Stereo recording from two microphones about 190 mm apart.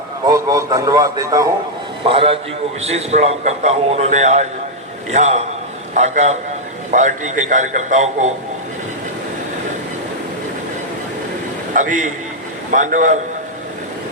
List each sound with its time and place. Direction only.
0.3 s a man's voice: 20° right (ahead or behind)
2.0 s a man's voice: 30° right (ahead or behind)
11.7 s a man's voice: 40° right (ahead or behind)